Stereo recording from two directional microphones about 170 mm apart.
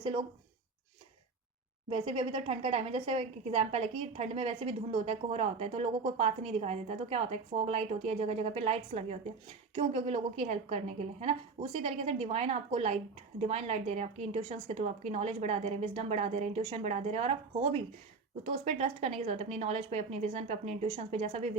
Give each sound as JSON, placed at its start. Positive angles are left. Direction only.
{"t": 0.0, "sound": "speech", "side_deg": -30}
{"t": 1.9, "sound": "a woman's voice", "side_deg": -30}